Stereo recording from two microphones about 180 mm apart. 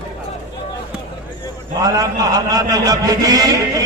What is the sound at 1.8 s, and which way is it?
A man's voice, 20° right (ahead or behind).